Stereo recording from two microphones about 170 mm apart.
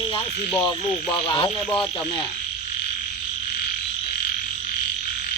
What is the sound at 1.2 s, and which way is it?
Speech, 30° left (ahead or behind).